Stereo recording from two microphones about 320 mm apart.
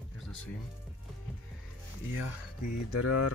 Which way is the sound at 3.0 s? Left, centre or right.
Left.